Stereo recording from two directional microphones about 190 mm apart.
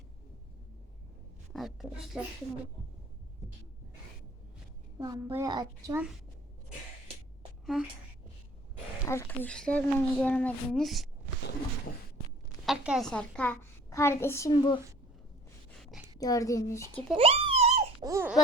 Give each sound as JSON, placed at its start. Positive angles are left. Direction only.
{"t": 1.5, "sound": "a child's voice", "side_deg": 0}
{"t": 4.9, "sound": "a woman's voice", "side_deg": -15}
{"t": 7.6, "sound": "a woman's voice", "side_deg": 0}
{"t": 9.0, "sound": "a child's voice", "side_deg": 10}
{"t": 12.6, "sound": "a woman's voice", "side_deg": -5}
{"t": 15.8, "sound": "a sound", "side_deg": 0}
{"t": 16.1, "sound": "speech", "side_deg": 20}
{"t": 17.2, "sound": "a sound", "side_deg": -30}
{"t": 18.0, "sound": "squeak", "side_deg": -15}